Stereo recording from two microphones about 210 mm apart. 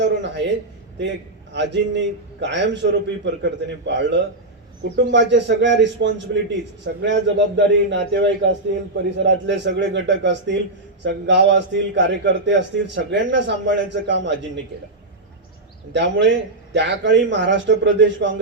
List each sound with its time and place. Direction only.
0.0 s a man's voice: 55° right (ahead or behind)
1.5 s a man's voice: 55° right (ahead or behind)
15.9 s a man's voice: 55° right (ahead or behind)